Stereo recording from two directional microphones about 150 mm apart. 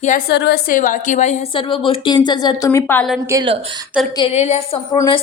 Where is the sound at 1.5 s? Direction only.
35° left (ahead or behind); by 3.0 s 15° left (ahead or behind).